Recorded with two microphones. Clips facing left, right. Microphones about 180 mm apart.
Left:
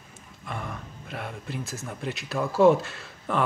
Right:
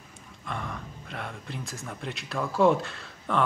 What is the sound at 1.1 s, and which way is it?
Speech, 5° left (ahead or behind).